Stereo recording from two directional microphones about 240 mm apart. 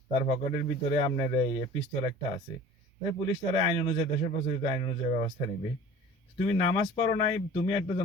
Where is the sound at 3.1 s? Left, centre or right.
Left.